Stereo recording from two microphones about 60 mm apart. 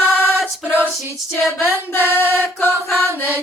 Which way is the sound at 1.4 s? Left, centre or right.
Left.